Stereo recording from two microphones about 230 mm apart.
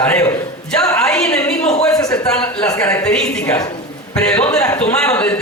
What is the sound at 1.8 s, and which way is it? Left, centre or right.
Speech, centre.